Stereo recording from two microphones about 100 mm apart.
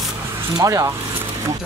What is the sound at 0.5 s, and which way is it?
Speech, 35° right (ahead or behind).